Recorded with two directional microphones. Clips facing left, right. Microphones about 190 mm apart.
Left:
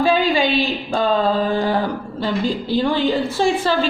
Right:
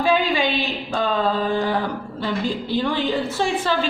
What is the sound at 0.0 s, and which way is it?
A woman's voice, 35° left (ahead or behind).